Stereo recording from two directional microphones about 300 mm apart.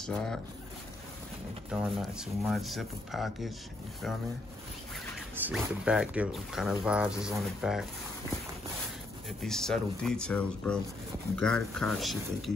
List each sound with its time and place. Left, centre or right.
0.0 s speech: centre
1.7 s speech: centre
4.9 s speech: centre
9.4 s speech: centre